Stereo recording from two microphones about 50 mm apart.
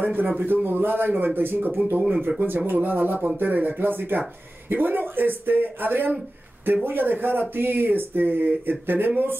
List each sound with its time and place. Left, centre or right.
0.0 s speech: right
0.7 s speech: right